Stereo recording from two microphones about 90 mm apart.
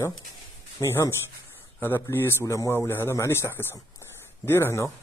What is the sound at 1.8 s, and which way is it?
A man's voice, 25° left (ahead or behind).